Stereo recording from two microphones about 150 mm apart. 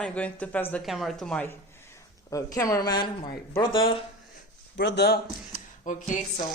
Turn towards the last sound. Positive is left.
turn(degrees=60)  # may be behind; listen again after turning